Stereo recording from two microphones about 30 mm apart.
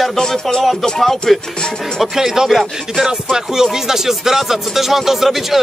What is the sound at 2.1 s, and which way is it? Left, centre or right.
Speech, centre.